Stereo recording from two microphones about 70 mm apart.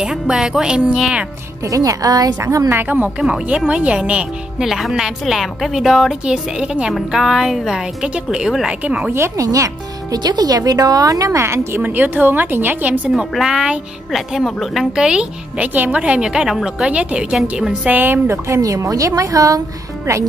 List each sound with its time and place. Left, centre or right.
0.0 s a woman's voice: centre
1.6 s a woman's voice: right
2.7 s a woman's voice: right
3.2 s a woman's voice: centre
4.6 s a woman's voice: centre
6.9 s a woman's voice: centre
9.4 s a woman's voice: right
10.1 s a woman's voice: right
11.8 s a woman's voice: right
13.1 s a woman's voice: centre
14.9 s a woman's voice: centre
17.8 s a woman's voice: right
18.2 s a woman's voice: right